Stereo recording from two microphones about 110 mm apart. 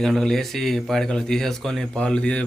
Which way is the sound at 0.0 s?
5° left (ahead or behind).